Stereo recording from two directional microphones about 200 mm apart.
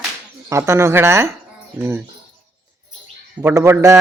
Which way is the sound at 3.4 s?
10° right (ahead or behind).